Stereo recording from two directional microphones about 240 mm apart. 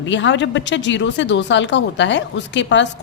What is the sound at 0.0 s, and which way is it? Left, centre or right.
A woman's voice, left.